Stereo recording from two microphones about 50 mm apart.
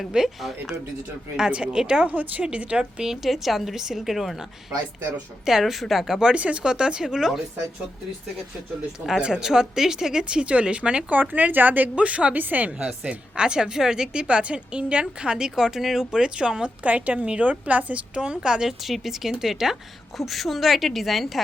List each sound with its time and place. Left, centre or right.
0.1 s speech: centre
1.5 s a woman's voice: right
2.0 s a woman's voice: right
2.4 s a woman's voice: right; by 4.4 s centre
5.5 s speech: centre
6.3 s speech: right; by 7.4 s centre
9.2 s speech: centre
10.4 s a woman's voice: right
11.2 s a woman's voice: right
13.1 s a woman's voice: centre
16.2 s speech: centre
16.8 s a woman's voice: right
18.2 s speech: centre
18.8 s a woman's voice: centre